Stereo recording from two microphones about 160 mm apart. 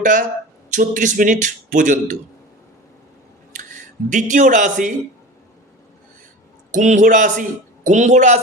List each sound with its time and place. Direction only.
0.0 s speech: 55° right (ahead or behind)
3.5 s speech: 55° right (ahead or behind)
6.7 s speech: 50° right (ahead or behind)